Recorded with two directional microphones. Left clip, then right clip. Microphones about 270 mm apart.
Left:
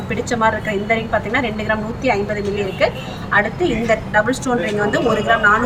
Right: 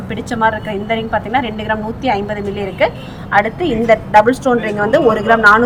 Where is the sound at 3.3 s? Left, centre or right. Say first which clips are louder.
Right 3 dB; centre.